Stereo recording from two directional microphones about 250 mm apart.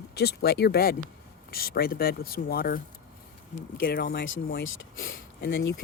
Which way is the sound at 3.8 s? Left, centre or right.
Left.